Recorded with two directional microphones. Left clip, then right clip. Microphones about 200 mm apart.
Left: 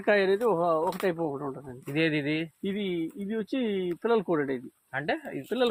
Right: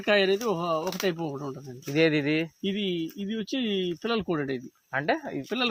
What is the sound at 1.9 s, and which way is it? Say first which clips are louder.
Speech: right 4 dB; 15° right (ahead or behind).